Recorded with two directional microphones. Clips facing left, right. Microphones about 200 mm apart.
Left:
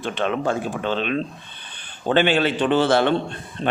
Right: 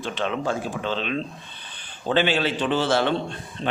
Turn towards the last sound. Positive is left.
turn(degrees=55)  # may be behind; listen again after turning